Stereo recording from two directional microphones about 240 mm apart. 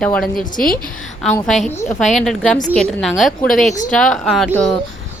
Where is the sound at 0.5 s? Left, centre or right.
Left.